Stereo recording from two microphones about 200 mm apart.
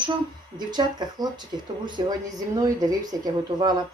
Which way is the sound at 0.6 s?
20° right (ahead or behind).